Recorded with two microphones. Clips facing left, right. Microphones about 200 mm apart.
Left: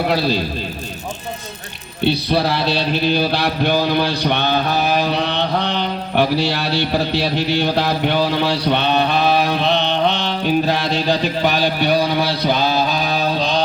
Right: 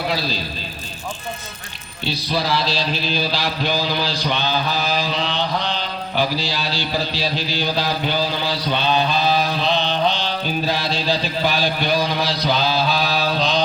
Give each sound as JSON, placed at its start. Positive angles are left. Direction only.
{"t": 0.1, "sound": "mantra", "side_deg": 60}
{"t": 2.0, "sound": "mantra", "side_deg": 60}